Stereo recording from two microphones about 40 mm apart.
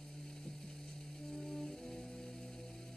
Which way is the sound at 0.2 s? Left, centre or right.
Centre.